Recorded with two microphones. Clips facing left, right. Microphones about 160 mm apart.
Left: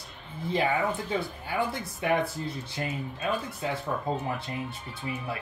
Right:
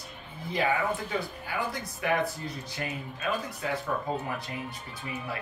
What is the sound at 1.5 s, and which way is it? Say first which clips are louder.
Speech: left 4 dB; 25° left (ahead or behind).